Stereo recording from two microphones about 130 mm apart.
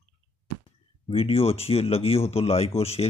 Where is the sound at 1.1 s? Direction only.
50° left (ahead or behind).